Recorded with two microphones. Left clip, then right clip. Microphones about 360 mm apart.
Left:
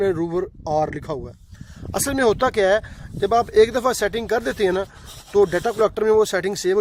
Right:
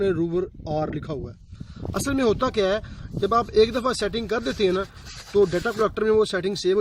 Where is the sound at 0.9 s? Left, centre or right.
Centre.